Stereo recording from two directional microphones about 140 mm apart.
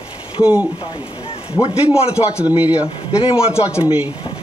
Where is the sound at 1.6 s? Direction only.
45° left (ahead or behind).